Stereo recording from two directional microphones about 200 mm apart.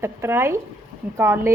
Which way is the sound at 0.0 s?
10° right (ahead or behind).